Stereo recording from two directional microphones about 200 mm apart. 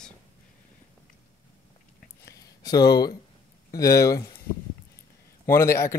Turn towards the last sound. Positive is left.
turn(degrees=15)  # may be behind; listen again after turning